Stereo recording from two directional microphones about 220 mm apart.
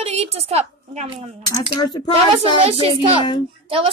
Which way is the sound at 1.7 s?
20° left (ahead or behind).